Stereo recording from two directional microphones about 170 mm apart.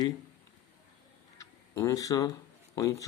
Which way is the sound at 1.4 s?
20° left (ahead or behind).